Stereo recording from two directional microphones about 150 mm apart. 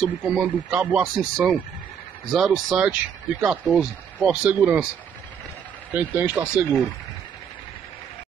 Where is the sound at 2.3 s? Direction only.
Centre (ahead or behind).